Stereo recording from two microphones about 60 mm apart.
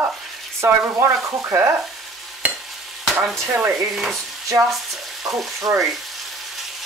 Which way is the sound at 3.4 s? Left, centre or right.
Right.